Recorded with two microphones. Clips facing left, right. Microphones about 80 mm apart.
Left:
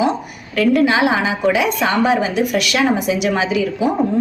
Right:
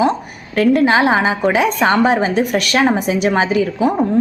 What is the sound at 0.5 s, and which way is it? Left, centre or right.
A woman's voice, right.